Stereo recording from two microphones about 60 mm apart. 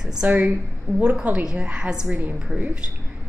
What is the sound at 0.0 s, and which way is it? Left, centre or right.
A woman's voice, centre.